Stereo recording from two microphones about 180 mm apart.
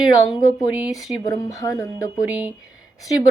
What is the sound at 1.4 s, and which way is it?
Speech, 20° left (ahead or behind).